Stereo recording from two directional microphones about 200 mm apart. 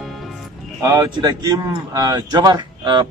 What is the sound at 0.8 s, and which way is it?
A man's voice, 15° right (ahead or behind).